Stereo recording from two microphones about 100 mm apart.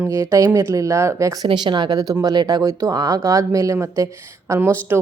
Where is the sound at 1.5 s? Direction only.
50° right (ahead or behind).